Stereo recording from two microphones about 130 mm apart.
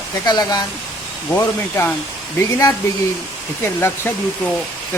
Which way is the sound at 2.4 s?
25° left (ahead or behind).